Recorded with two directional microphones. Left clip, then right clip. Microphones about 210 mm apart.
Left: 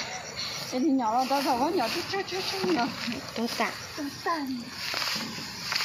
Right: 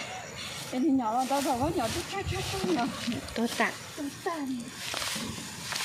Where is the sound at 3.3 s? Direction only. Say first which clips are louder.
Right 1 dB; 15° right (ahead or behind).